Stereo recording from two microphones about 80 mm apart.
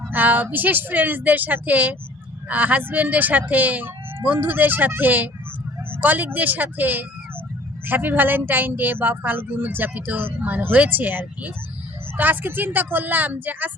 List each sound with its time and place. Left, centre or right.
0.1 s a woman's voice: right